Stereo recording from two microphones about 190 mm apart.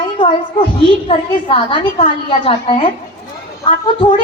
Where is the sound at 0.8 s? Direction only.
30° left (ahead or behind).